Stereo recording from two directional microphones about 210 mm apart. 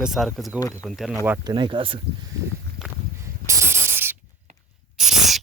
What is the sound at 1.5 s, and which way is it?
Speech, 25° right (ahead or behind).